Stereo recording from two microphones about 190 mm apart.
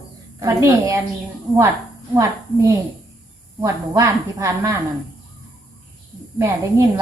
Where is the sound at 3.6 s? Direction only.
15° right (ahead or behind).